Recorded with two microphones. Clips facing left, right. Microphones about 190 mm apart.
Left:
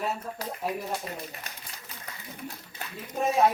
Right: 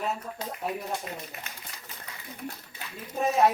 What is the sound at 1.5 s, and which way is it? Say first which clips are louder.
Speech: left 1 dB; 35° left (ahead or behind).